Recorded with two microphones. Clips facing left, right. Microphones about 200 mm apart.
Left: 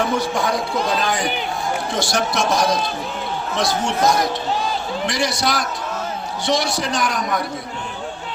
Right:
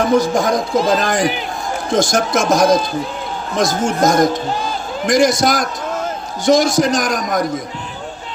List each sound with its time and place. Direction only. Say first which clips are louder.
0.0 s a man's voice: right 6 dB; 40° right (ahead or behind)
1.2 s speech: right 5 dB; centre (ahead or behind)
2.0 s a man's voice: right 7 dB; 45° right (ahead or behind)